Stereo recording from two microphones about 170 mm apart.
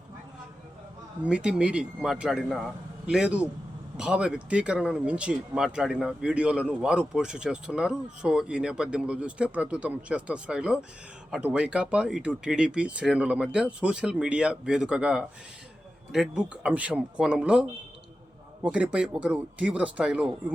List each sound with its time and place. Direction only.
1.2 s speech: 5° right (ahead or behind)